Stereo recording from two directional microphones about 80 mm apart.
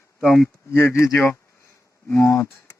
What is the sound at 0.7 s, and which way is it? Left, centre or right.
Speech, left.